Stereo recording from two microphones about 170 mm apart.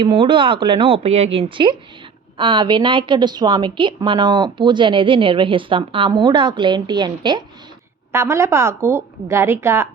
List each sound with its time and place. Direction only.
0.0 s a woman's voice: 25° right (ahead or behind)
8.1 s a woman's voice: 15° right (ahead or behind)